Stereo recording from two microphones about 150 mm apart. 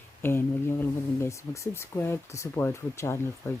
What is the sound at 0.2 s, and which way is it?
Speech, 15° left (ahead or behind).